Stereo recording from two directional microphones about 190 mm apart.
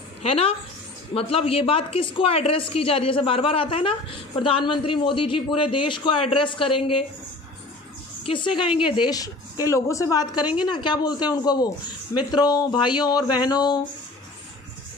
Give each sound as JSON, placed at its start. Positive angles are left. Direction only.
{"t": 0.2, "sound": "a woman's voice", "side_deg": 30}
{"t": 8.3, "sound": "a woman's voice", "side_deg": 25}